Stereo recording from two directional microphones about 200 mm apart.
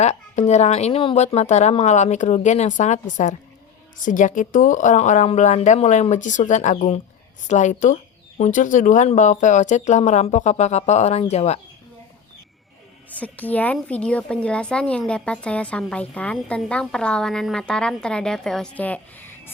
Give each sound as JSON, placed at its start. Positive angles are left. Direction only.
{"t": 0.0, "sound": "speech", "side_deg": 35}
{"t": 13.1, "sound": "a woman's voice", "side_deg": 5}